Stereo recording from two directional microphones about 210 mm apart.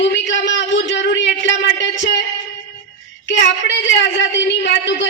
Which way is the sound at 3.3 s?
60° left (ahead or behind).